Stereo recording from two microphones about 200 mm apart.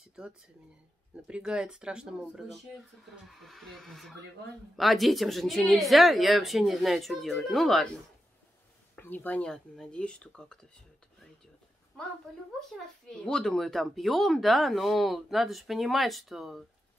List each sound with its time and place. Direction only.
0.2 s speech: 5° right (ahead or behind)
8.9 s speech: 10° left (ahead or behind)
12.5 s speech: centre (ahead or behind)